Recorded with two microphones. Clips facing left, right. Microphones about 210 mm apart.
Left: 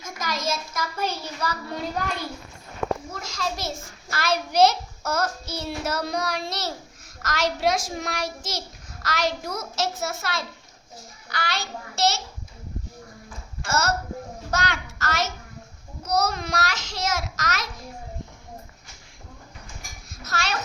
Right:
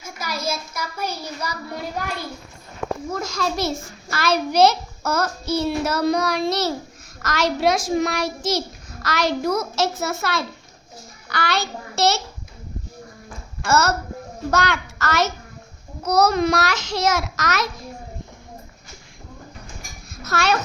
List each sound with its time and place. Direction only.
0.0 s a child's voice: 10° right (ahead or behind)
3.1 s a child's voice: 50° right (ahead or behind); by 12.2 s 65° right (ahead or behind)
13.6 s a child's voice: 65° right (ahead or behind)
20.1 s a sound: 60° right (ahead or behind)